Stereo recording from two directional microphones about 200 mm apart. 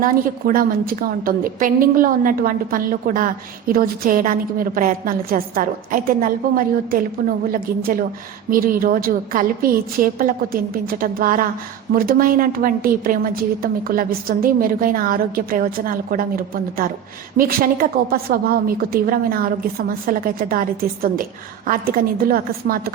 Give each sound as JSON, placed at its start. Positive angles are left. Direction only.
{"t": 0.0, "sound": "a woman's voice", "side_deg": -45}